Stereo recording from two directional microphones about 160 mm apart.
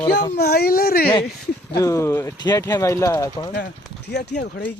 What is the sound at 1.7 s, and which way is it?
Speech, 20° left (ahead or behind).